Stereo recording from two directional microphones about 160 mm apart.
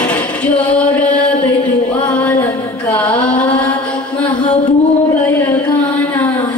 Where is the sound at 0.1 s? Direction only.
10° left (ahead or behind).